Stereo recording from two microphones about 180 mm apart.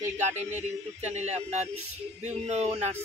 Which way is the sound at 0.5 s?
40° right (ahead or behind).